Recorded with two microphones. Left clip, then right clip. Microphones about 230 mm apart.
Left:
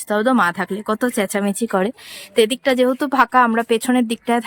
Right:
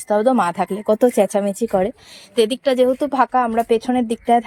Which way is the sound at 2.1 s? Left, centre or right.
Centre.